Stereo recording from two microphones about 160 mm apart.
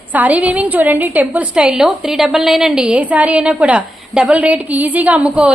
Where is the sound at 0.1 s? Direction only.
10° right (ahead or behind).